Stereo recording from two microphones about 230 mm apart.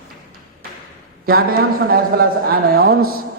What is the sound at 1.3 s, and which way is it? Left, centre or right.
A man's voice, right.